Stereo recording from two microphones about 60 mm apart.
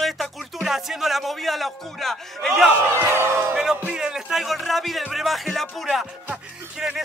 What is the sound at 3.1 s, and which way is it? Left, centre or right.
Speech, right.